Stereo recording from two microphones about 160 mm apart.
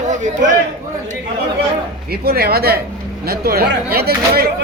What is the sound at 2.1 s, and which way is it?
Speech, 75° right (ahead or behind).